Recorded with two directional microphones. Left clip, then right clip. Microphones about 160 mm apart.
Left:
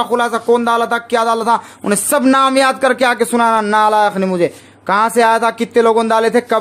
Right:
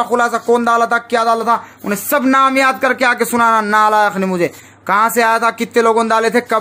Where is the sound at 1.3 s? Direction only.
25° left (ahead or behind).